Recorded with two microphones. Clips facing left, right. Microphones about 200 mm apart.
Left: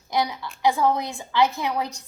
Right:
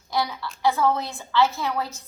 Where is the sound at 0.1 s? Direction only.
20° left (ahead or behind).